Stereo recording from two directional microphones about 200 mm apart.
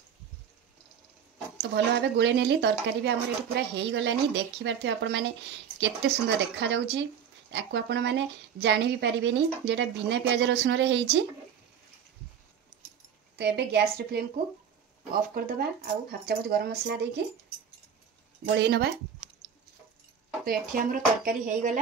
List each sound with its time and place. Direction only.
1.6 s speech: 55° right (ahead or behind)
13.4 s speech: 55° right (ahead or behind)
15.2 s speech: 45° right (ahead or behind)
18.6 s speech: 55° right (ahead or behind)
20.4 s speech: 45° right (ahead or behind)